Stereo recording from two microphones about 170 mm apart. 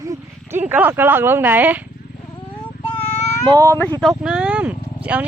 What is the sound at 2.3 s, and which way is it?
Vehicle, 30° left (ahead or behind).